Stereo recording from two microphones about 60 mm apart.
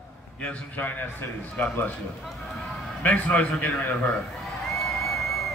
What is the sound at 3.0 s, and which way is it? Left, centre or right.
Speech, left.